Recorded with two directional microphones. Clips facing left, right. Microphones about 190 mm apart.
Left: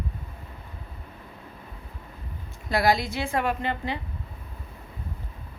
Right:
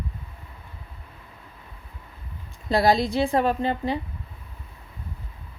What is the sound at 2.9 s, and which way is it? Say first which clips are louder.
Speech: right 6 dB; 35° right (ahead or behind).